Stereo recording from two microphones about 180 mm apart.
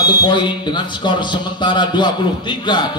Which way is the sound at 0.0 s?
25° left (ahead or behind).